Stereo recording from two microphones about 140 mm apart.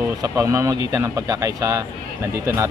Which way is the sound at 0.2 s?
20° right (ahead or behind).